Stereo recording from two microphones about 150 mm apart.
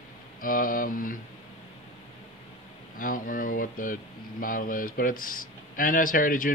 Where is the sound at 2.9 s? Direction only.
65° left (ahead or behind).